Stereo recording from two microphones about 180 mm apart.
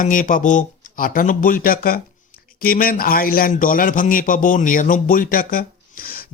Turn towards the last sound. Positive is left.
turn(degrees=50)  # may be behind; listen again after turning